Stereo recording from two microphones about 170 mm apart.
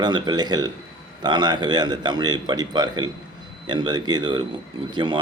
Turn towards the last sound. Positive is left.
turn(degrees=-30)  # may be behind; listen again after turning